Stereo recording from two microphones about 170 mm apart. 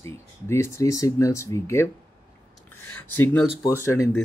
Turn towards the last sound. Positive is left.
turn(degrees=15)  # may be behind; listen again after turning